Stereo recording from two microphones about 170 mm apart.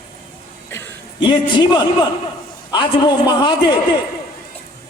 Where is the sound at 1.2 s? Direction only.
30° left (ahead or behind).